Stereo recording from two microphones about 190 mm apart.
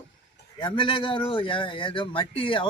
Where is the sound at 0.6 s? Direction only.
25° left (ahead or behind).